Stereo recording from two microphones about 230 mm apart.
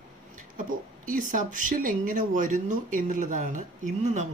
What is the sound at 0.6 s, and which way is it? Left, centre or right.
Speech, right.